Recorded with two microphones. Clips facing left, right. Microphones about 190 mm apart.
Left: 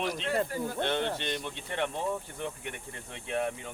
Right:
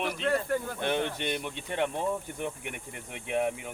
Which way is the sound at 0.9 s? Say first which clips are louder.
Right 1 dB; 10° right (ahead or behind).